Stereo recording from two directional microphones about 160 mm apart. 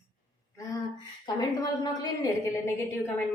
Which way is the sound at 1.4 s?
20° left (ahead or behind).